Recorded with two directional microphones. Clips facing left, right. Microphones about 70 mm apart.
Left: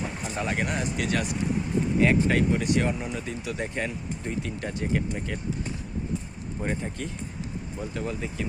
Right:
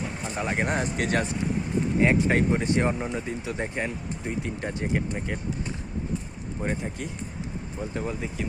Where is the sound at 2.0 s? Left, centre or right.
Right.